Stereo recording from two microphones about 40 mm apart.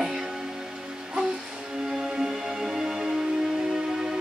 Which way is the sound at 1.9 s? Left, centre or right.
Centre.